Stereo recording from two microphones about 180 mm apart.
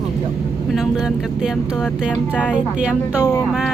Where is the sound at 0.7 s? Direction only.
Centre (ahead or behind).